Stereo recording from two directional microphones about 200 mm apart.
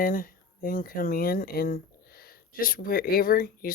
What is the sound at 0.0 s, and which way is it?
Speech, 45° left (ahead or behind).